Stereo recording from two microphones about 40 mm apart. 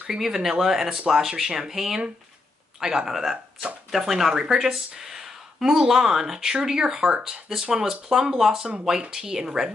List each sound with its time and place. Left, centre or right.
0.1 s speech: centre
3.1 s speech: centre
8.5 s speech: right
9.1 s speech: centre